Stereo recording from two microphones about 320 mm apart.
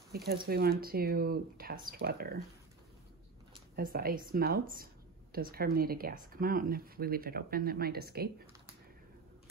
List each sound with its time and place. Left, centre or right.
0.1 s speech: right
3.7 s speech: right